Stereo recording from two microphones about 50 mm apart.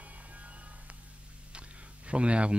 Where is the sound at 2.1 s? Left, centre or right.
Right.